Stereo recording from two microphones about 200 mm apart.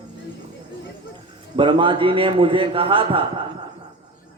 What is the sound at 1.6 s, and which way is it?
Music, 25° right (ahead or behind).